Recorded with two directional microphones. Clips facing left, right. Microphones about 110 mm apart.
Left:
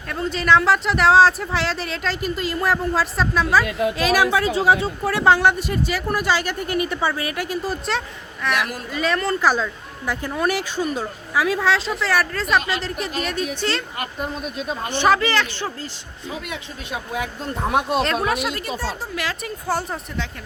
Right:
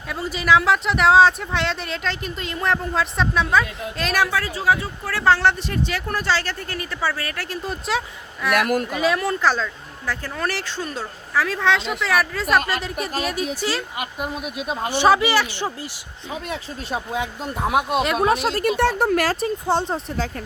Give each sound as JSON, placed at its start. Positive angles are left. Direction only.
{"t": 0.1, "sound": "speech", "side_deg": -5}
{"t": 3.7, "sound": "a woman's voice", "side_deg": 75}
{"t": 3.9, "sound": "speech", "side_deg": 5}
{"t": 4.3, "sound": "speech", "side_deg": 20}
{"t": 8.5, "sound": "speech", "side_deg": -50}
{"t": 8.9, "sound": "speech", "side_deg": -5}
{"t": 9.4, "sound": "speech", "side_deg": 10}
{"t": 17.1, "sound": "speech", "side_deg": -20}
{"t": 17.5, "sound": "speech", "side_deg": -5}
{"t": 18.8, "sound": "speech", "side_deg": -60}
{"t": 19.6, "sound": "speech", "side_deg": -25}